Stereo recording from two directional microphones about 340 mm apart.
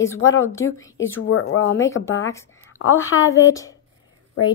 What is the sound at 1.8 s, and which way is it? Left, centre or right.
A woman's voice, centre.